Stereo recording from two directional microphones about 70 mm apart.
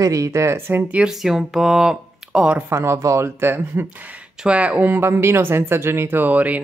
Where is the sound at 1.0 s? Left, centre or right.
Centre.